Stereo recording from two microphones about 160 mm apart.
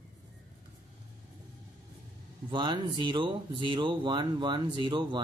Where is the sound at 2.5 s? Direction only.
30° right (ahead or behind).